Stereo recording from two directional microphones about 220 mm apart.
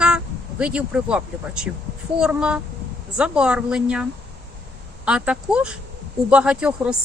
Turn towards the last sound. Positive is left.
turn(degrees=-5)  # may be behind; listen again after turning